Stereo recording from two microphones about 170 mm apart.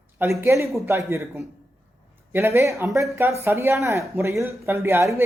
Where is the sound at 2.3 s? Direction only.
15° right (ahead or behind).